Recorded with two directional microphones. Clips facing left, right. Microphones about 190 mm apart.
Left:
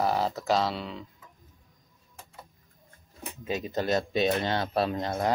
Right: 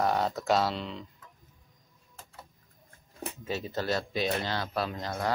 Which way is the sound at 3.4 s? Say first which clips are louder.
Left 3 dB; 15° left (ahead or behind).